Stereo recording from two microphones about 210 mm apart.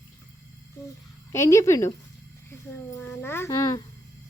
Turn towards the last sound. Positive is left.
turn(degrees=15)  # may be behind; listen again after turning